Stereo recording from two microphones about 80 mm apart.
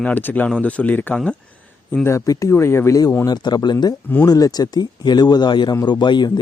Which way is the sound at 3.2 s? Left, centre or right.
Left.